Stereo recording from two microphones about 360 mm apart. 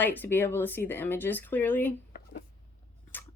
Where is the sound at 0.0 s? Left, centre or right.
Centre.